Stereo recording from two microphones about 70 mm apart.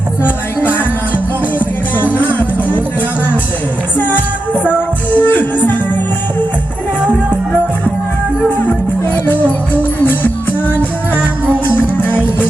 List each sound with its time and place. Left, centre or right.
0.3 s music: left
3.9 s music: left
11.6 s music: left